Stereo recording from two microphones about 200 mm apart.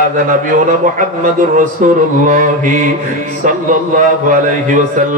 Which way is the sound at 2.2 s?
40° right (ahead or behind).